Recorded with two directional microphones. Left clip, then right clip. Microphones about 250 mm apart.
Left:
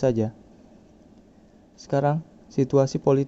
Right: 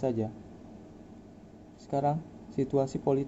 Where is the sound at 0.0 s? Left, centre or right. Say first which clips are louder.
Left 8 dB; left.